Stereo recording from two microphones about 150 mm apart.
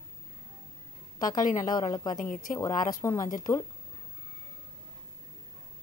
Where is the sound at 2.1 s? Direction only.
60° left (ahead or behind).